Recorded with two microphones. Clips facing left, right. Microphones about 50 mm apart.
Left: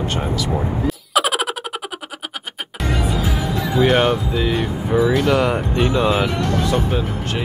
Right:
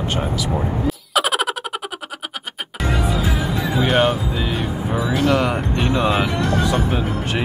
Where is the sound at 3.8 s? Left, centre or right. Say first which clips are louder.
Left 2 dB; centre.